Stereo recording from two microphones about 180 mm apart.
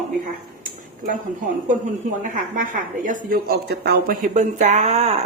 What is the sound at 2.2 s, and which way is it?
A woman's voice, 45° right (ahead or behind).